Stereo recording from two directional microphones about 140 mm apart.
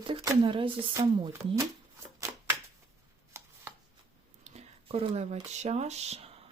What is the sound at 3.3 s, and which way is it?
Chopping, 20° right (ahead or behind).